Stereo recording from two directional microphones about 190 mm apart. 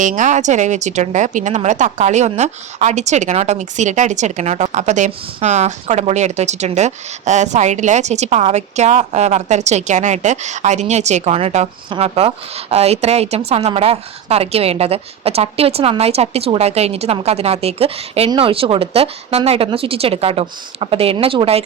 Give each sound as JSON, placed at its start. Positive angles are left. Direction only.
{"t": 0.0, "sound": "speech", "side_deg": -40}